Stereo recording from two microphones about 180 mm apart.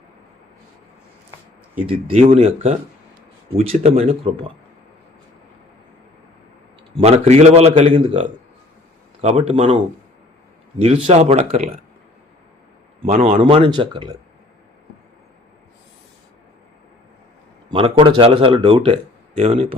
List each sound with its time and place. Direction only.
1.9 s a man's voice: 30° right (ahead or behind)
6.9 s a man's voice: 35° right (ahead or behind)
13.1 s speech: 45° right (ahead or behind)
13.4 s speech: 30° right (ahead or behind)
17.7 s a man's voice: 30° right (ahead or behind)